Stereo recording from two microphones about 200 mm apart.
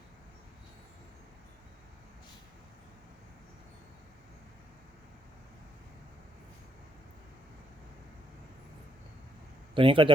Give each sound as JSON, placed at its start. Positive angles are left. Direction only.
{"t": 9.7, "sound": "speech", "side_deg": -25}